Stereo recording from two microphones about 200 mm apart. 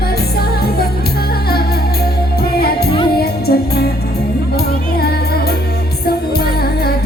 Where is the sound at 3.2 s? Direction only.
50° left (ahead or behind).